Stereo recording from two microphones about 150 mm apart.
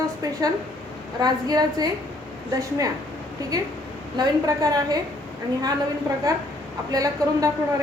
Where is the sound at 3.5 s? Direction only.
25° right (ahead or behind).